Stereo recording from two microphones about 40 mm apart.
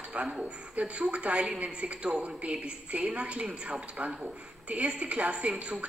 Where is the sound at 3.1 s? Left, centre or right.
Right.